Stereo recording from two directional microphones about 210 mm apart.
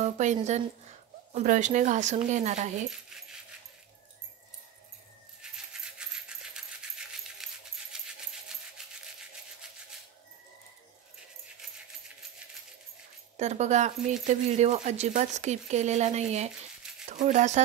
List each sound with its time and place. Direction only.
0.0 s speech: 35° right (ahead or behind)
5.4 s music: 5° right (ahead or behind)
7.9 s coin: 5° right (ahead or behind)
8.8 s a sound: 5° right (ahead or behind)
13.4 s speech: 35° right (ahead or behind)